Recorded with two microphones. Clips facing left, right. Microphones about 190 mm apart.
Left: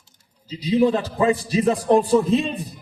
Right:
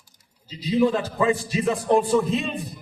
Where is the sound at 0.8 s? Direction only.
35° left (ahead or behind).